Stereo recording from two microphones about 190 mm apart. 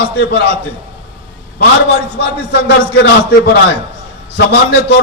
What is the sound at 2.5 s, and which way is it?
A man's voice, 65° left (ahead or behind).